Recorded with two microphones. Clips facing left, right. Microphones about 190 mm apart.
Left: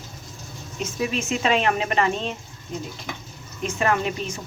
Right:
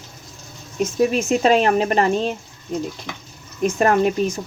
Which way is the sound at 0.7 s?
45° right (ahead or behind).